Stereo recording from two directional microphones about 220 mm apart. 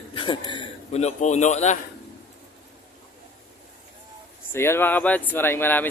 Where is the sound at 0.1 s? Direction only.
20° left (ahead or behind).